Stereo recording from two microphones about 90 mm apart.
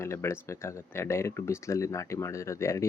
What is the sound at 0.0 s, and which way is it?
Speech, 30° left (ahead or behind).